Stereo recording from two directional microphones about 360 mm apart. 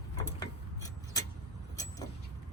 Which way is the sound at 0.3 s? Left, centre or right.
Centre.